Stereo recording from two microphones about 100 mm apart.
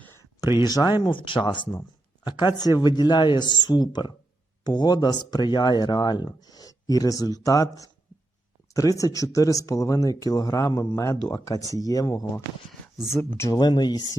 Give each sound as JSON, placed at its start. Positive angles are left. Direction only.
{"t": 0.0, "sound": "a sound", "side_deg": 25}
{"t": 0.6, "sound": "speech", "side_deg": 40}
{"t": 1.0, "sound": "speech", "side_deg": 50}
{"t": 13.0, "sound": "speech", "side_deg": -5}
{"t": 13.5, "sound": "speech", "side_deg": 45}